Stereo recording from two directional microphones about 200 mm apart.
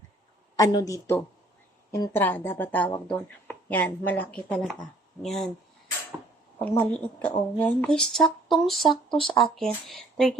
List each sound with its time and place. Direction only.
0.5 s speech: 20° left (ahead or behind); by 5.5 s centre (ahead or behind)
6.7 s speech: 5° left (ahead or behind)